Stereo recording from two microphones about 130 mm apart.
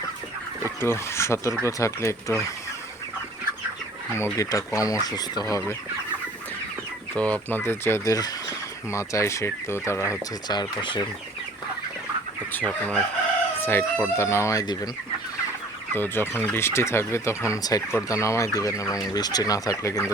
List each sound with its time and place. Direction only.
0.8 s speech: 20° left (ahead or behind)
4.1 s speech: 25° left (ahead or behind)
7.2 s speech: 10° left (ahead or behind)
10.5 s speech: 35° left (ahead or behind)
12.5 s speech: 10° left (ahead or behind); by 14.8 s 30° left (ahead or behind)
15.9 s speech: 15° left (ahead or behind)